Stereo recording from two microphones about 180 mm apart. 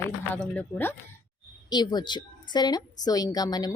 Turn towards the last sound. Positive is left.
turn(degrees=20)  # may be behind; listen again after turning